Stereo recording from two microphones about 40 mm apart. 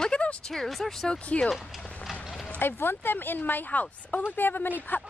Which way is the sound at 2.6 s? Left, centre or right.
Left.